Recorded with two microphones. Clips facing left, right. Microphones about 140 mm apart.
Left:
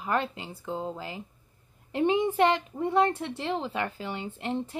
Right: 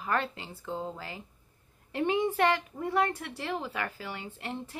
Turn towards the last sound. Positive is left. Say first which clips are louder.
# left 6 dB
turn(degrees=20)  # may be behind; listen again after turning